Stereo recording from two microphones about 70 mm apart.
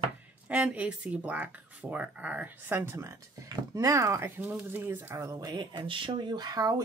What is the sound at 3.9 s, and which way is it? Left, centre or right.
Speech, right.